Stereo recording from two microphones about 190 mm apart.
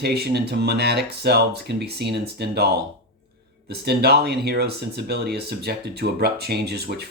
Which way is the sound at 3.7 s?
55° right (ahead or behind).